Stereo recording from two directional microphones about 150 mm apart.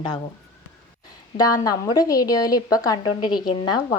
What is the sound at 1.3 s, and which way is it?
A woman's voice, 25° left (ahead or behind).